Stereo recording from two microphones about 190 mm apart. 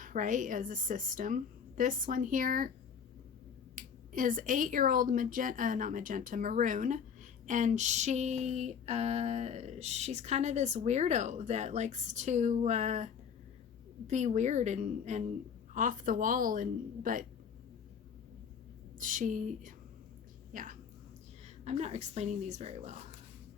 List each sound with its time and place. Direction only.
0.0 s a woman's voice: 45° right (ahead or behind)
3.8 s speech: 45° right (ahead or behind)
14.1 s a woman's voice: 40° right (ahead or behind)
18.9 s a woman's voice: 45° right (ahead or behind)